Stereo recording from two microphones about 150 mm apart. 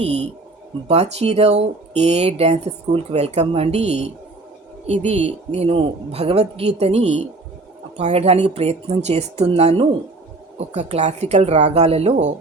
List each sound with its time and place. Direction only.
0.0 s speech: 45° right (ahead or behind)